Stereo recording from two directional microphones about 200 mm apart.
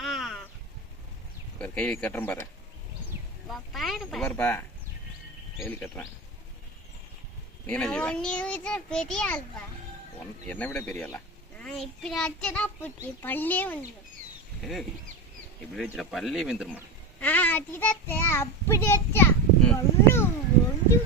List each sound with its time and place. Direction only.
0.0 s a sound: centre (ahead or behind)
1.5 s speech: 5° left (ahead or behind)
3.5 s a child's voice: centre (ahead or behind)
5.6 s speech: 10° left (ahead or behind)
7.7 s a child's voice: 5° left (ahead or behind)
17.2 s child singing: 10° left (ahead or behind)